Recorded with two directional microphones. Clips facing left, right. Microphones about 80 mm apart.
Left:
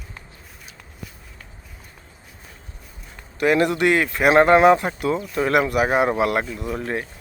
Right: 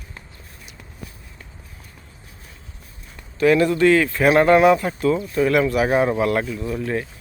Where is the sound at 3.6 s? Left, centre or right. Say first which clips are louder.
Right 3 dB; centre.